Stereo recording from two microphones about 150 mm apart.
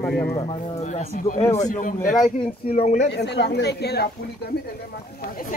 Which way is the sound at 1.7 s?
65° left (ahead or behind).